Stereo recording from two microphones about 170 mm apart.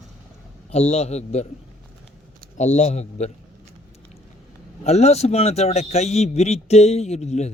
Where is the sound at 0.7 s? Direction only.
40° left (ahead or behind).